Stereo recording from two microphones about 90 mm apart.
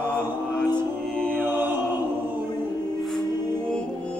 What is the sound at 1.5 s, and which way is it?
Music, 20° right (ahead or behind).